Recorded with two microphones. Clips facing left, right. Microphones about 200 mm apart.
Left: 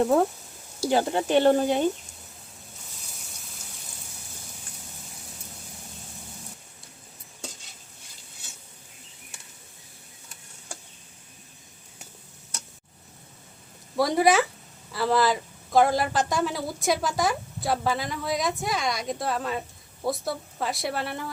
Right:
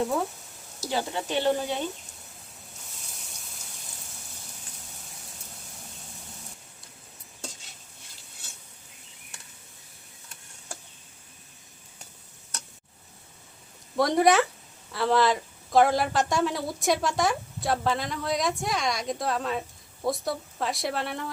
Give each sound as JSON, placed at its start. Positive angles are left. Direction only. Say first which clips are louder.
{"t": 0.0, "sound": "speech", "louder": "left 6 dB", "side_deg": 55}
{"t": 13.9, "sound": "a woman's voice", "louder": "even", "side_deg": 0}